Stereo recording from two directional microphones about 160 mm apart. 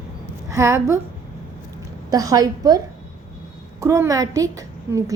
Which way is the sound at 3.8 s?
20° right (ahead or behind).